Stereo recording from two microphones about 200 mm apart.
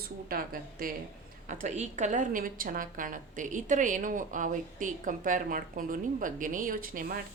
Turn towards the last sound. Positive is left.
turn(degrees=-45)  # may be behind; listen again after turning